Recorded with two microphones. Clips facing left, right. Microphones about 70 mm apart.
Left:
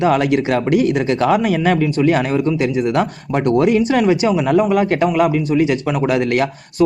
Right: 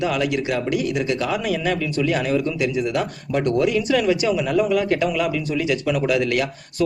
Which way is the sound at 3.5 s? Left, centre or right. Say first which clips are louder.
Left 6 dB; left.